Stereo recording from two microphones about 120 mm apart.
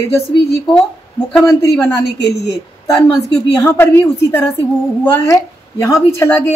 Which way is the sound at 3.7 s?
15° left (ahead or behind).